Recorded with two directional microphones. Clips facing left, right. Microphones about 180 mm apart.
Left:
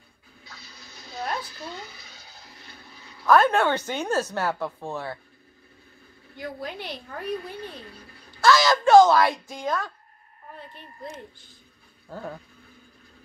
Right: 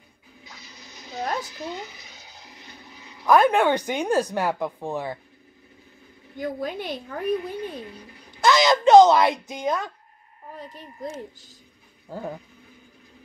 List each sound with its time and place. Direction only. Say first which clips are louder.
0.5 s a sound: right 1 dB; 20° right (ahead or behind)
1.4 s speech: right 4 dB; 20° right (ahead or behind)
6.6 s a woman's voice: right 5 dB; 50° right (ahead or behind)
7.2 s a woman's voice: right 6 dB; 20° right (ahead or behind)
10.6 s speech: right 6 dB; 40° right (ahead or behind)
12.1 s speech: right 3 dB; 15° right (ahead or behind)